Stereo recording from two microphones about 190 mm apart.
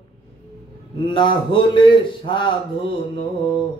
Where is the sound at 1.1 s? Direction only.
25° left (ahead or behind).